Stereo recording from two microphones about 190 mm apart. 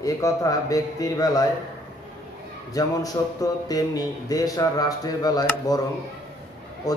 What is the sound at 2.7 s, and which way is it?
A man's voice, 20° left (ahead or behind).